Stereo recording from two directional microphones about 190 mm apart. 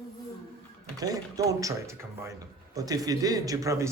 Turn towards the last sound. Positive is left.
turn(degrees=-15)  # may be behind; listen again after turning